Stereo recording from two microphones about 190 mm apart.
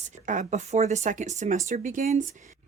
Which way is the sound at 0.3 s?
40° right (ahead or behind).